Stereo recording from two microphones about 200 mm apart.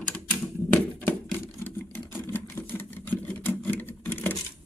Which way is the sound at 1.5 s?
10° left (ahead or behind).